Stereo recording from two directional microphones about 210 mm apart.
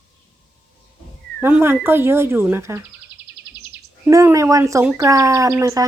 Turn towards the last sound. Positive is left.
turn(degrees=-15)  # may be behind; listen again after turning